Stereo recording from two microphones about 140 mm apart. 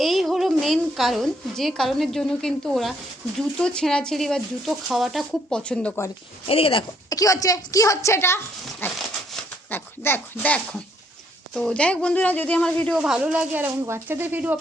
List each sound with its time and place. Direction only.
0.0 s a woman's voice: centre (ahead or behind)
6.5 s speech: 40° left (ahead or behind)
7.1 s a woman's voice: 25° left (ahead or behind); by 13.0 s 5° left (ahead or behind)
13.0 s speech: 5° right (ahead or behind)